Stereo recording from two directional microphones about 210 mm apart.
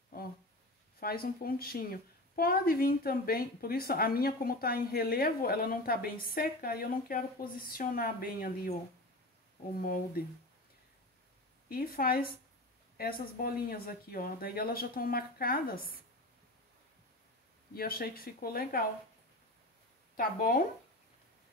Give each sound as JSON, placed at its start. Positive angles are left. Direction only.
{"t": 0.9, "sound": "a woman's voice", "side_deg": 45}
{"t": 9.8, "sound": "a woman's voice", "side_deg": 45}
{"t": 11.7, "sound": "a woman's voice", "side_deg": 45}
{"t": 17.7, "sound": "a woman's voice", "side_deg": 45}
{"t": 20.2, "sound": "a woman's voice", "side_deg": 45}